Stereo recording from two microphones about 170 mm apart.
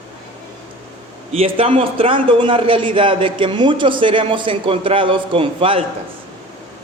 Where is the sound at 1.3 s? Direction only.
35° right (ahead or behind).